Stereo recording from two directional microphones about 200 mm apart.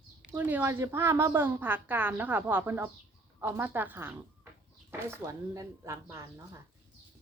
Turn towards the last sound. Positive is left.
turn(degrees=-15)  # may be behind; listen again after turning